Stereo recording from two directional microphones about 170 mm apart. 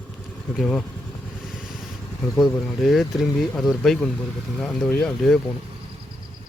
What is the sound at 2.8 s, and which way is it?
Speech, centre (ahead or behind).